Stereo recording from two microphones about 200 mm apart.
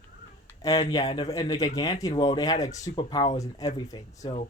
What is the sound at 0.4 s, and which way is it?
Speech, 15° left (ahead or behind).